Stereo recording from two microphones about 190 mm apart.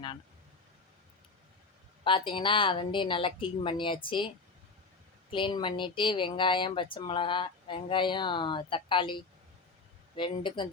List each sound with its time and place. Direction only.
2.0 s speech: 25° left (ahead or behind)
5.3 s speech: 25° left (ahead or behind)